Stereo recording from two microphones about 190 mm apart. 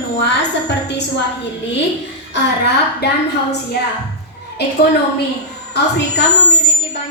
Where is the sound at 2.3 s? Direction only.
60° left (ahead or behind).